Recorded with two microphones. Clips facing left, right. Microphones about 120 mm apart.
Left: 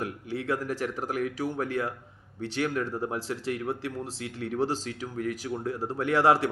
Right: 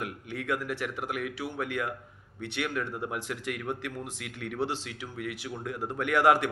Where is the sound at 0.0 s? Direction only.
35° left (ahead or behind).